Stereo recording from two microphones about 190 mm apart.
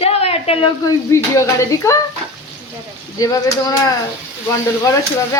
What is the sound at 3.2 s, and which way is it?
Speech, 20° left (ahead or behind).